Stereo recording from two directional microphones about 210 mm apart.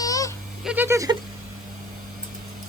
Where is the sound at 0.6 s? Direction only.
5° right (ahead or behind).